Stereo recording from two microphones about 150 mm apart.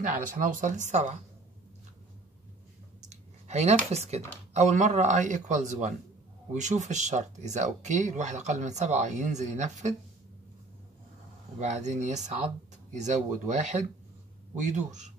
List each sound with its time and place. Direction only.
0.0 s speech: 60° right (ahead or behind)
3.1 s a sound: 50° right (ahead or behind)
4.6 s speech: 50° right (ahead or behind)
11.6 s speech: 50° right (ahead or behind)